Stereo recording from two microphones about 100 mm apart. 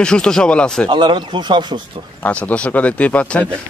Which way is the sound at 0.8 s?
50° right (ahead or behind).